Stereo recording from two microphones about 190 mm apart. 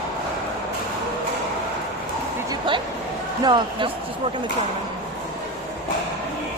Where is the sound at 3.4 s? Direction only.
25° right (ahead or behind).